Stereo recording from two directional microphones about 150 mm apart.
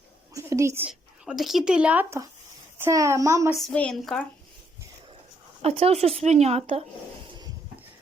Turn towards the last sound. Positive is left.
turn(degrees=-40)  # may be behind; listen again after turning